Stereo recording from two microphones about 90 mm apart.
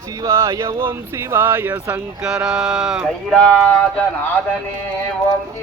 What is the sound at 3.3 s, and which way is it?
Speech, 10° left (ahead or behind).